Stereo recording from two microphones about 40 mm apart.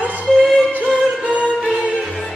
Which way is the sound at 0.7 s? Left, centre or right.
Right.